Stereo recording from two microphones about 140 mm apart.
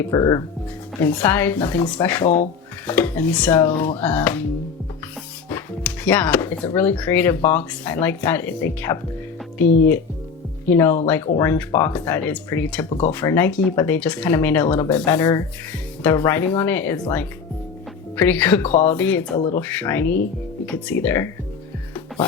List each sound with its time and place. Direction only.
0.1 s speech: 30° left (ahead or behind)
1.0 s speech: 10° left (ahead or behind)
5.8 s speech: 10° left (ahead or behind)